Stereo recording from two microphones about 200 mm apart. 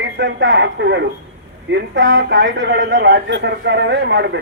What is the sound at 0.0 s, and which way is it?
A man's voice, 65° right (ahead or behind).